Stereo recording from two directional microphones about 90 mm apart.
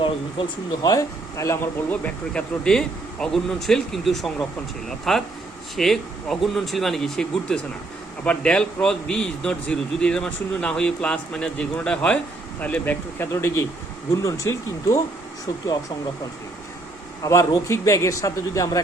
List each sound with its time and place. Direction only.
0.0 s speech: 60° left (ahead or behind)
1.4 s a man's voice: 30° left (ahead or behind)
1.9 s a man's voice: 10° left (ahead or behind); by 15.0 s 35° left (ahead or behind)
17.2 s a man's voice: 35° left (ahead or behind)